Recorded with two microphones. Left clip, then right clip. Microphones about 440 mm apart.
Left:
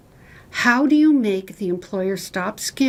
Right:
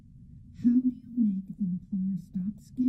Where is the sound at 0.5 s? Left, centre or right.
Left.